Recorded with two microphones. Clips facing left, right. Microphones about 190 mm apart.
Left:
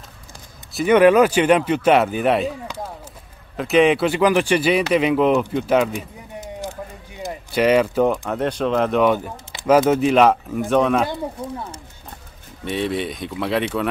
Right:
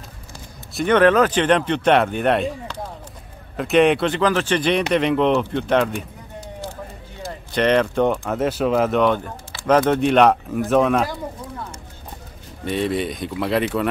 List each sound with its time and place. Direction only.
0.7 s speech: 10° left (ahead or behind)
7.2 s speech: 10° left (ahead or behind)
11.4 s speech: 25° left (ahead or behind)
12.6 s speech: centre (ahead or behind)